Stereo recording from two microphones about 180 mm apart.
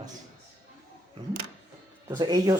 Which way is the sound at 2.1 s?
20° right (ahead or behind).